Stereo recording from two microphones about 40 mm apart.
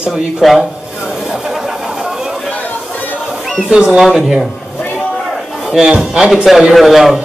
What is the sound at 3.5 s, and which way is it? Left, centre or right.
Speech, right.